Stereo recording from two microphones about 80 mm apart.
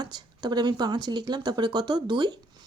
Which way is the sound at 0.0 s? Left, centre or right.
Right.